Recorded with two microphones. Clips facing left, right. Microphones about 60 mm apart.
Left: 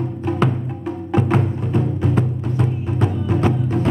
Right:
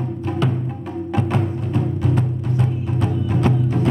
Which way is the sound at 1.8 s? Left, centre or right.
Centre.